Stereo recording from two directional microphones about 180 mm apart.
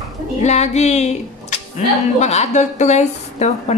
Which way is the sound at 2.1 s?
40° left (ahead or behind).